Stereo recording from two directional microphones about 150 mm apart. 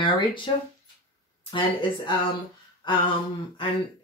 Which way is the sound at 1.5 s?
30° left (ahead or behind).